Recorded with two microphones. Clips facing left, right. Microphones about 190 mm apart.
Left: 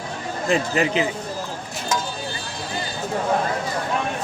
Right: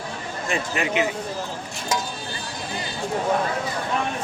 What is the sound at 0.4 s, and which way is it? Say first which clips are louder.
Speech: left 5 dB; 35° left (ahead or behind).